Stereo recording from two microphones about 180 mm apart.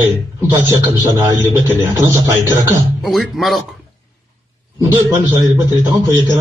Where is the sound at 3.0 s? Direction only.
Centre (ahead or behind).